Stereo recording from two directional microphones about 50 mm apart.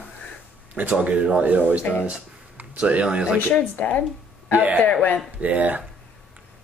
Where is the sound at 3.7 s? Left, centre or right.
Left.